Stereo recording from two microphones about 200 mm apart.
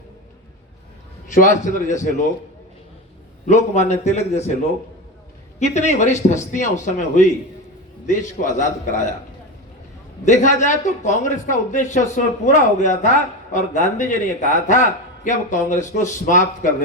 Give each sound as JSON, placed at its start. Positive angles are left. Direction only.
{"t": 1.3, "sound": "a man's voice", "side_deg": 40}
{"t": 3.4, "sound": "a man's voice", "side_deg": 35}
{"t": 5.5, "sound": "a man's voice", "side_deg": 35}
{"t": 10.2, "sound": "a man's voice", "side_deg": 40}